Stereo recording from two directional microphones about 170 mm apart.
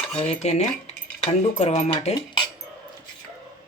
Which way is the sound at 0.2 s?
40° left (ahead or behind).